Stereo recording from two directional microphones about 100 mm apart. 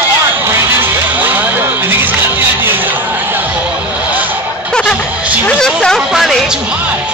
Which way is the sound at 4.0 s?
15° right (ahead or behind).